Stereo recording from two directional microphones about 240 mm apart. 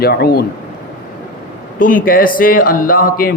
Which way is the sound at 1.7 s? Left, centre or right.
Left.